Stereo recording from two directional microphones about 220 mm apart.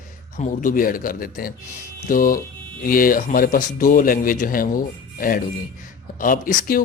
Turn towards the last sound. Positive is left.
turn(degrees=40)  # may be behind; listen again after turning